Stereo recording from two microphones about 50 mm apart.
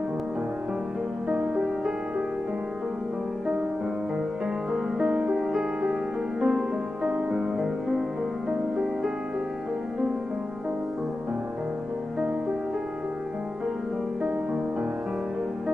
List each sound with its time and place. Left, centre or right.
4.7 s music: centre
14.2 s music: right